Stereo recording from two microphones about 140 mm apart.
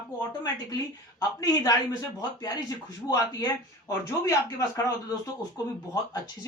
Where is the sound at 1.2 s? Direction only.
25° left (ahead or behind).